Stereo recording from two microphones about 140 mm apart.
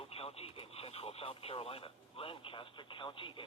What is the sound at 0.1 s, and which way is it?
Speech, 45° left (ahead or behind).